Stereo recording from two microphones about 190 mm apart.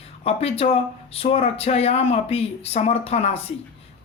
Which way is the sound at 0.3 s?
30° left (ahead or behind).